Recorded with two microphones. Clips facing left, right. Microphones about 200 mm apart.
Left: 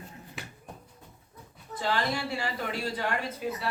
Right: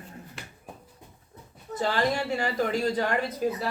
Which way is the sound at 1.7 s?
45° right (ahead or behind).